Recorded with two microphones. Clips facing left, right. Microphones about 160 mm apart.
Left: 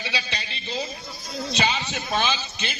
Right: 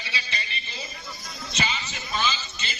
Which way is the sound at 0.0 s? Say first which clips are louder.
Left 4 dB; 85° left.